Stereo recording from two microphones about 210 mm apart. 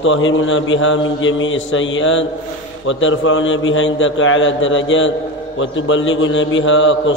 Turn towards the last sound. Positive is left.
turn(degrees=65)  # may be behind; listen again after turning